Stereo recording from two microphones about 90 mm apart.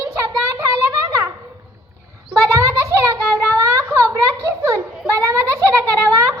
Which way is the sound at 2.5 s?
35° right (ahead or behind).